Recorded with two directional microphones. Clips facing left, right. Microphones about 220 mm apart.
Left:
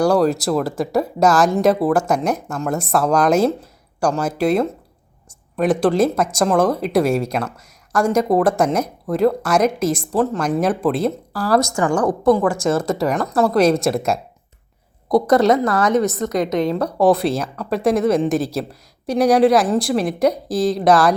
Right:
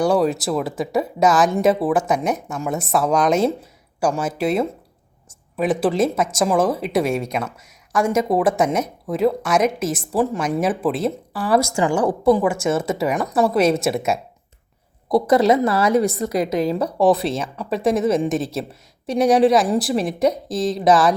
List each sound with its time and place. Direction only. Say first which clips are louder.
0.0 s speech: left 2 dB; centre (ahead or behind)